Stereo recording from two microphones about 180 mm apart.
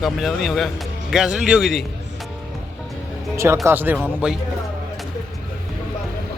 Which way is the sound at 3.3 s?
15° right (ahead or behind).